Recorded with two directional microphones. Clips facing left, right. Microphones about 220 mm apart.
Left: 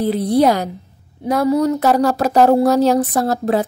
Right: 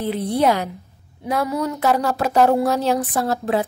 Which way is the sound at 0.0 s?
35° left (ahead or behind).